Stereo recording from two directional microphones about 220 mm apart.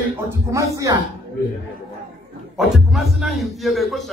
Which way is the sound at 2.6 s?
Centre (ahead or behind).